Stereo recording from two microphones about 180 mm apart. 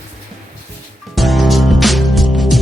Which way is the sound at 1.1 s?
Centre (ahead or behind).